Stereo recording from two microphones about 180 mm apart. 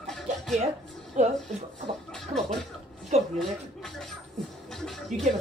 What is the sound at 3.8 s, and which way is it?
Music, centre (ahead or behind).